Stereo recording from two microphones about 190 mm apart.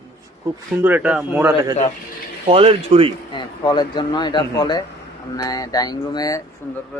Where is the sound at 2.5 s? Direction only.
30° right (ahead or behind).